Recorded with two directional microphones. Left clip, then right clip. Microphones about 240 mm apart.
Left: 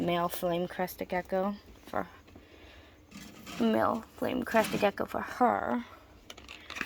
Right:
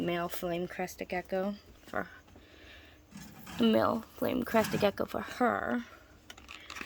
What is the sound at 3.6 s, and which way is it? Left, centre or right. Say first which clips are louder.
Speech: even; right.